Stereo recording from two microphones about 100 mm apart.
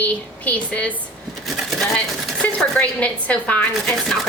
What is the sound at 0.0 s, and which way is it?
Chopping, 15° left (ahead or behind).